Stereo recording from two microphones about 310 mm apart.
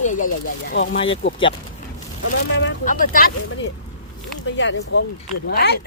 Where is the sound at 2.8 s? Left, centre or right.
Left.